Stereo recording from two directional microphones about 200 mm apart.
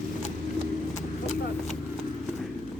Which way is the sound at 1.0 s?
35° left (ahead or behind).